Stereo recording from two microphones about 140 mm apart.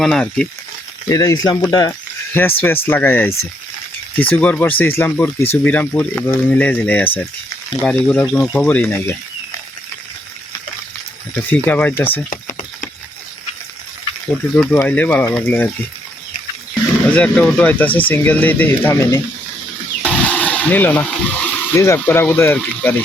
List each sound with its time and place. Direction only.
0.0 s speech: 5° left (ahead or behind)
1.0 s speech: 25° left (ahead or behind)
2.3 s speech: 15° left (ahead or behind)
11.5 s speech: 10° left (ahead or behind)
12.3 s a sound: 80° left
14.3 s speech: 10° left (ahead or behind)
17.1 s speech: 10° left (ahead or behind)
20.0 s a sound: 10° left (ahead or behind)
21.8 s speech: 15° left (ahead or behind)